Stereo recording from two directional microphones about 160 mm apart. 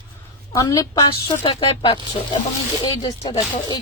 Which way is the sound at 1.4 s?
30° left (ahead or behind).